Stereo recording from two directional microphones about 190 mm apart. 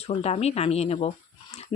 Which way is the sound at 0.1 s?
35° left (ahead or behind).